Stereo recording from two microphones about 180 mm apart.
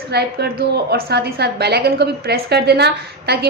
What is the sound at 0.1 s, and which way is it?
A woman's voice, 65° right (ahead or behind).